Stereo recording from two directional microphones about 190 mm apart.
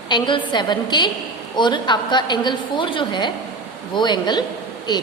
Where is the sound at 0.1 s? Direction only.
25° left (ahead or behind).